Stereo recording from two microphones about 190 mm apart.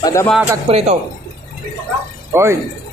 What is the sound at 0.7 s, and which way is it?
Speech, 35° right (ahead or behind).